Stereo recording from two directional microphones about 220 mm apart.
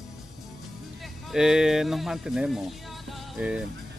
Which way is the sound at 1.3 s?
Centre (ahead or behind).